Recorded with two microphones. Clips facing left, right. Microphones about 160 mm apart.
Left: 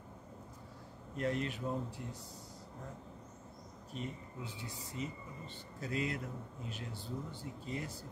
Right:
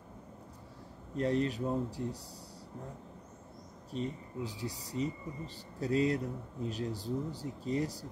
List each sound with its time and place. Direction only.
1.1 s speech: 35° right (ahead or behind)
3.9 s speech: 35° right (ahead or behind)